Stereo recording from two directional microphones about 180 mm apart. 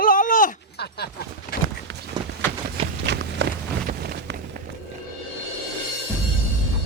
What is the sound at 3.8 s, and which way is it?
Wind noise, 60° right (ahead or behind).